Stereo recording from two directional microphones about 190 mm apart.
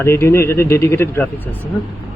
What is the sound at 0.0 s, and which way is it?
Speech, 15° left (ahead or behind).